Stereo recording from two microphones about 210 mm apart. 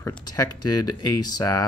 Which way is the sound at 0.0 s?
15° left (ahead or behind).